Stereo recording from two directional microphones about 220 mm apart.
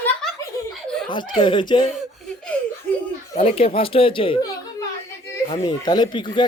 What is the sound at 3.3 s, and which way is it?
Speech, 25° left (ahead or behind).